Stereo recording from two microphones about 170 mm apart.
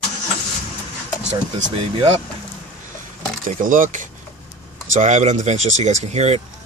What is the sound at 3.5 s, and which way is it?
Speech, 50° right (ahead or behind).